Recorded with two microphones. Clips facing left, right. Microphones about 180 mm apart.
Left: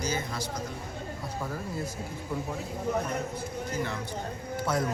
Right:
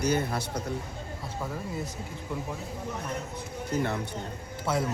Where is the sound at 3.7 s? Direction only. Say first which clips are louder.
Right 5 dB; 55° right (ahead or behind).